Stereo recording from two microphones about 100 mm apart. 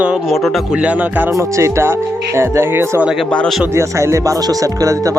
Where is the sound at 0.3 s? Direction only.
Centre (ahead or behind).